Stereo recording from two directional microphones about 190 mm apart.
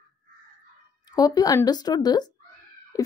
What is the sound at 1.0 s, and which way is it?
Speech, 20° left (ahead or behind).